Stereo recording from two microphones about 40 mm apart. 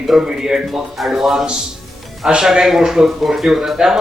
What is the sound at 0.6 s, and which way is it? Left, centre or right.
A man's voice, centre.